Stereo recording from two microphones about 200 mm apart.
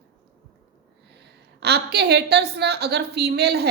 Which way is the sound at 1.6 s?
55° right (ahead or behind).